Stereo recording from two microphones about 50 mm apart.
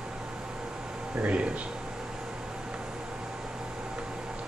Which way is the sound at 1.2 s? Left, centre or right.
Right.